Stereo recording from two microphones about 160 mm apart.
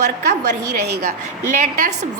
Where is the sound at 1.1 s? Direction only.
45° right (ahead or behind).